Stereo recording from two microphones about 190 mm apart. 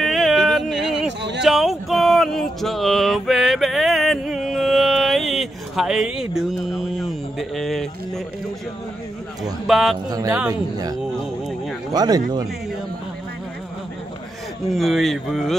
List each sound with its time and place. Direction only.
0.0 s a sound: centre (ahead or behind)
9.4 s speech: centre (ahead or behind)
10.0 s speech: 20° right (ahead or behind)
14.7 s speech: centre (ahead or behind)